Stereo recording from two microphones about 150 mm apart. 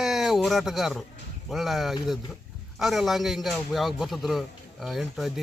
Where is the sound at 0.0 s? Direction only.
Centre (ahead or behind).